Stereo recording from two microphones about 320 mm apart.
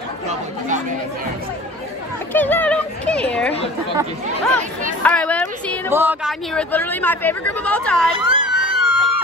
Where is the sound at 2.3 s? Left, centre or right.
Centre.